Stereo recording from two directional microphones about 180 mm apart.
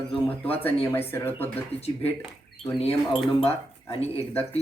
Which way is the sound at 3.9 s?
35° left (ahead or behind).